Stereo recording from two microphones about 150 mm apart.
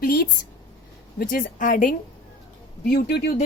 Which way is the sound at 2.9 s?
90° left.